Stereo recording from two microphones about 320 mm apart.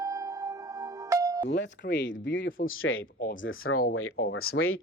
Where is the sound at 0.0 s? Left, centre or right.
Centre.